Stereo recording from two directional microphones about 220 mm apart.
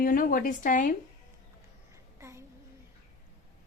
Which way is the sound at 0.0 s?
40° left (ahead or behind).